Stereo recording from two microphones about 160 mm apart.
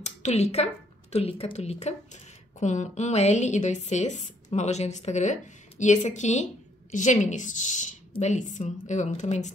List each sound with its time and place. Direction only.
0.0 s a woman's voice: 45° left (ahead or behind)